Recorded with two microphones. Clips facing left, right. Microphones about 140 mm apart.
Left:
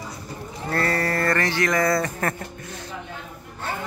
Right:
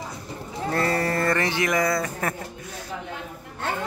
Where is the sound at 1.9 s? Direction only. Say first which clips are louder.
Left 2 dB; 5° right (ahead or behind).